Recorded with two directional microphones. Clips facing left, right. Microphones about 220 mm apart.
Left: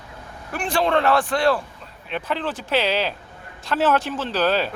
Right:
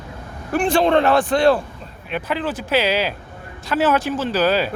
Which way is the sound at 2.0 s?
5° right (ahead or behind).